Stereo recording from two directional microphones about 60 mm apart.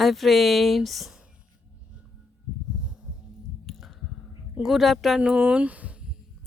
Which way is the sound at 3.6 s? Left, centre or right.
Centre.